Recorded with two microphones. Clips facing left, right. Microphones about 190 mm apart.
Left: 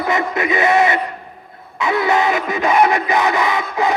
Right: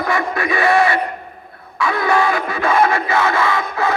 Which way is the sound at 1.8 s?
20° left (ahead or behind).